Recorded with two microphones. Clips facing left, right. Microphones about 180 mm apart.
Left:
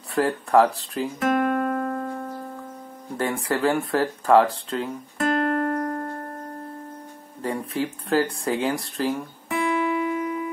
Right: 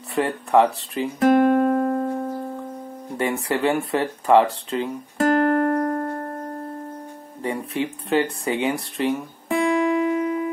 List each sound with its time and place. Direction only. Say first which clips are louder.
0.1 s speech: even; centre (ahead or behind)
1.2 s music: right 7 dB; 30° right (ahead or behind)
3.2 s speech: right 1 dB; centre (ahead or behind)
5.7 s music: right 4 dB; 30° right (ahead or behind)
7.4 s speech: right 1 dB; 5° right (ahead or behind)
9.5 s music: right 4 dB; 30° right (ahead or behind)